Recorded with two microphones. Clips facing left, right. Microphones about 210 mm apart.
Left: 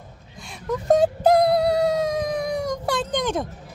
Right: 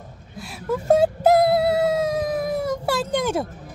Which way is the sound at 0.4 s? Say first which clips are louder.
Right 2 dB; 5° right (ahead or behind).